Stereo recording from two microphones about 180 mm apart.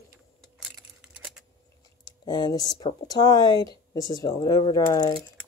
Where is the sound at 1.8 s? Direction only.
20° left (ahead or behind).